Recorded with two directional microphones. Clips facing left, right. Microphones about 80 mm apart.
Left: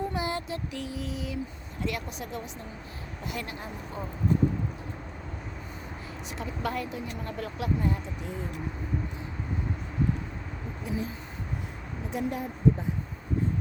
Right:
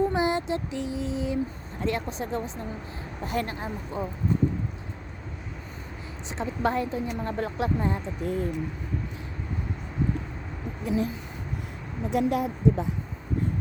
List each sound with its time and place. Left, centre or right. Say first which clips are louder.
0.1 s a sound: right 6 dB; right
1.8 s speech: right 5 dB; right
6.3 s speech: right 6 dB; right
8.2 s speech: right 8 dB; right
10.8 s speech: right 6 dB; right
12.1 s speech: right 7 dB; right